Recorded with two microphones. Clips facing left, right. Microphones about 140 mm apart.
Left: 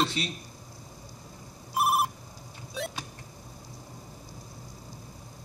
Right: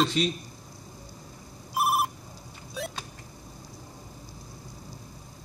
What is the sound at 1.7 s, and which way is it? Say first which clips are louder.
Telephone bell ringing: even; centre (ahead or behind).